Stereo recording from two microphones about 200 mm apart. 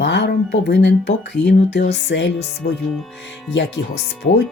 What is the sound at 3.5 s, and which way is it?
Speech, 60° left (ahead or behind).